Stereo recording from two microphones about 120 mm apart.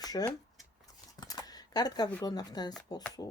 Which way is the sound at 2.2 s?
35° left (ahead or behind).